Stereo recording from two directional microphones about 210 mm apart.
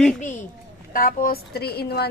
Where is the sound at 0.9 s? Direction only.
40° left (ahead or behind).